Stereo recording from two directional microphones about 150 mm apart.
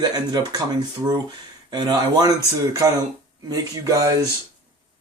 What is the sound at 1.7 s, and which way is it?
Speech, 25° right (ahead or behind).